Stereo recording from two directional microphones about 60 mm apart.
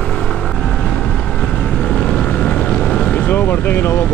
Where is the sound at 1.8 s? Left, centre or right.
Centre.